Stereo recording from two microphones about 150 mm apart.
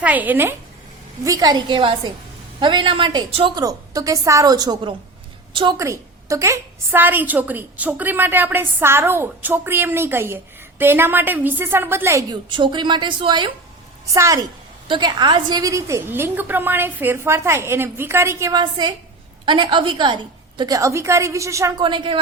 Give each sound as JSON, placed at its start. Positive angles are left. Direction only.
{"t": 0.0, "sound": "a woman's voice", "side_deg": -10}
{"t": 1.2, "sound": "a woman's voice", "side_deg": -25}
{"t": 3.6, "sound": "a woman's voice", "side_deg": -25}
{"t": 12.3, "sound": "a woman's voice", "side_deg": -35}
{"t": 14.1, "sound": "a woman's voice", "side_deg": -20}
{"t": 21.8, "sound": "a woman's voice", "side_deg": -35}